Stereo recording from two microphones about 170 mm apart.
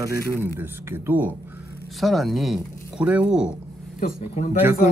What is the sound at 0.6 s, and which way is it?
Speech, 15° right (ahead or behind).